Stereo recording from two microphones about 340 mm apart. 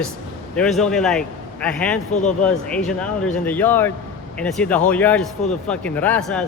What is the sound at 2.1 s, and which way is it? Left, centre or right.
Speech, left.